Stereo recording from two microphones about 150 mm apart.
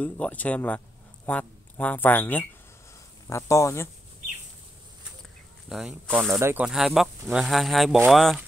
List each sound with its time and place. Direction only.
0.0 s speech: 10° left (ahead or behind)
5.7 s speech: centre (ahead or behind)
6.3 s speech: 15° right (ahead or behind)